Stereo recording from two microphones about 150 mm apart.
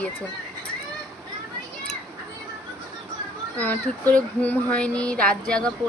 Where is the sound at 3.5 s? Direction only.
10° left (ahead or behind).